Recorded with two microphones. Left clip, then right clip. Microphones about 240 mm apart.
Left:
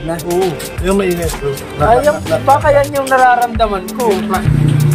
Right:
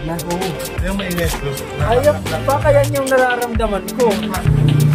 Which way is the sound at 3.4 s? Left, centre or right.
Centre.